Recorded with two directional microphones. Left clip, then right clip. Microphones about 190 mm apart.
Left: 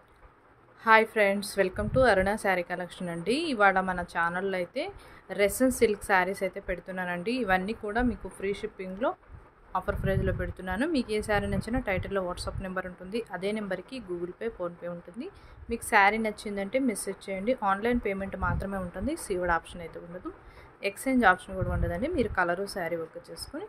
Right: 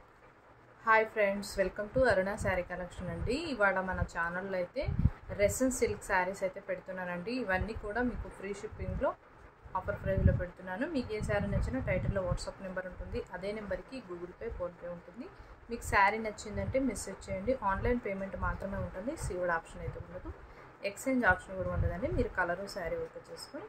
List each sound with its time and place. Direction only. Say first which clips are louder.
0.8 s a woman's voice: left 6 dB; 60° left (ahead or behind)
15.7 s a woman's voice: left 5 dB; 50° left (ahead or behind)
20.8 s a woman's voice: left 6 dB; 55° left (ahead or behind)